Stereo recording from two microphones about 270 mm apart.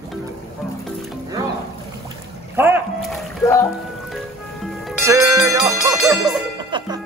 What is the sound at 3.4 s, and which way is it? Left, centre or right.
Speech, centre.